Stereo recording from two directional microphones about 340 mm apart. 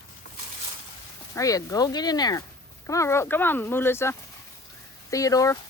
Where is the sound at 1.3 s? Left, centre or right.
Centre.